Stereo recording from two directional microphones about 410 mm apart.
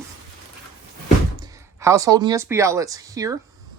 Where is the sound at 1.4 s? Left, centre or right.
Centre.